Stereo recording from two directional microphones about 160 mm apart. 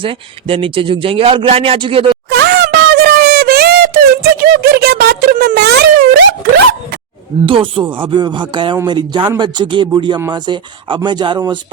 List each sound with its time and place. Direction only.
0.0 s a man's voice: 35° right (ahead or behind)
2.3 s a sound: 90° right
7.4 s a man's voice: 35° right (ahead or behind)